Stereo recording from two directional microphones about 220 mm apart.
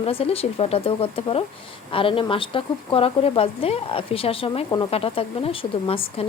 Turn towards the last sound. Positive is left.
turn(degrees=25)  # may be behind; listen again after turning